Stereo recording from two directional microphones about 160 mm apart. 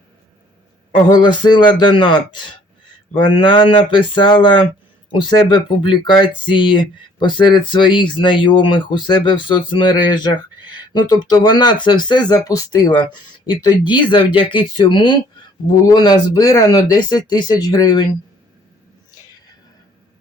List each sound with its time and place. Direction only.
1.1 s speech: 30° left (ahead or behind)